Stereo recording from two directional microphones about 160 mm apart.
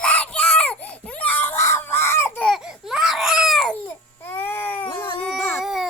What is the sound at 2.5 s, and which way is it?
Baby cry, centre (ahead or behind).